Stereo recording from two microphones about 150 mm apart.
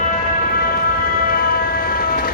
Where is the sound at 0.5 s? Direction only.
80° left.